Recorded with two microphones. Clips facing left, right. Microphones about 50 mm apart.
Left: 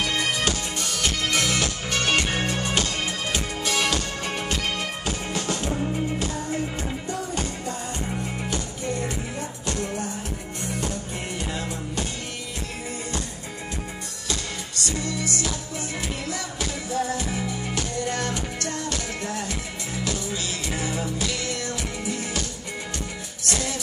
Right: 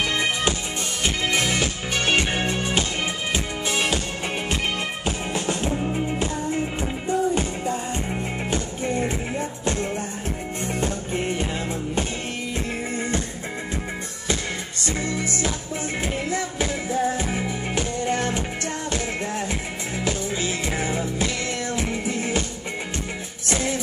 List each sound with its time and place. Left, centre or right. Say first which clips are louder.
0.0 s music: right 2 dB; right
14.2 s music: right 4 dB; right
23.4 s music: right 3 dB; right